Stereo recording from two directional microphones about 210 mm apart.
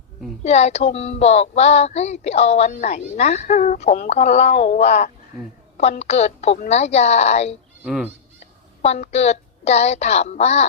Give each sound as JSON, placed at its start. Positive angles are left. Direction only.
{"t": 0.4, "sound": "speech", "side_deg": 30}
{"t": 7.9, "sound": "fowl", "side_deg": -5}
{"t": 8.8, "sound": "speech", "side_deg": 30}